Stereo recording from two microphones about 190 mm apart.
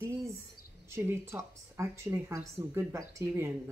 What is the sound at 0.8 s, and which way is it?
Speech, 15° right (ahead or behind).